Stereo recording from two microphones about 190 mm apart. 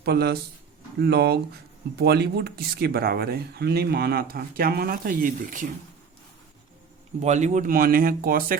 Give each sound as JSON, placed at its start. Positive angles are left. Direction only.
{"t": 0.0, "sound": "speech", "side_deg": -55}
{"t": 7.2, "sound": "speech", "side_deg": -35}